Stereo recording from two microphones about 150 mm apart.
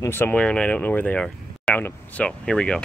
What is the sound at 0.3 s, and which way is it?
Speech, 5° left (ahead or behind).